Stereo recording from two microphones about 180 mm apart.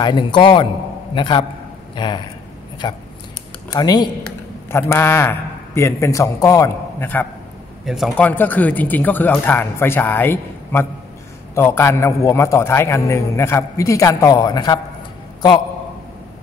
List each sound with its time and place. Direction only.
0.0 s a man's voice: 25° left (ahead or behind)
7.8 s a man's voice: centre (ahead or behind); by 14.8 s 20° left (ahead or behind)